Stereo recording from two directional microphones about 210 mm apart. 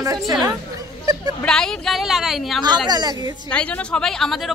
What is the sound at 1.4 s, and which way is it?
A woman's voice, 5° left (ahead or behind).